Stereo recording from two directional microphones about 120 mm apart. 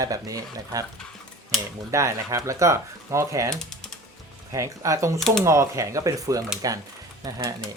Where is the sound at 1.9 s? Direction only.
25° right (ahead or behind).